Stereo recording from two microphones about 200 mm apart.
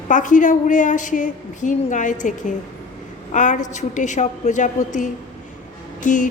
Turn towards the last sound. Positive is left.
turn(degrees=40)  # may be behind; listen again after turning